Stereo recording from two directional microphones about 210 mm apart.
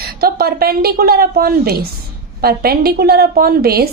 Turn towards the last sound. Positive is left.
turn(degrees=-45)  # may be behind; listen again after turning